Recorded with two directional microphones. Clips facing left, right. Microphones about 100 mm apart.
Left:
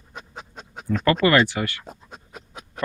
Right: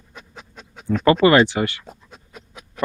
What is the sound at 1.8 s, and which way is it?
Pant, 35° left (ahead or behind).